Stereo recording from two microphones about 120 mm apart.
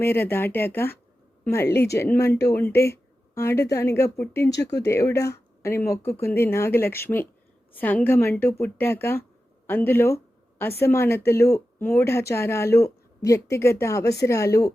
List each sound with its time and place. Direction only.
0.0 s speech: 20° left (ahead or behind)